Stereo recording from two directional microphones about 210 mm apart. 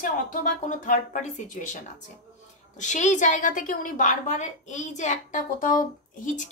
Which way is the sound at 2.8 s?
35° left (ahead or behind).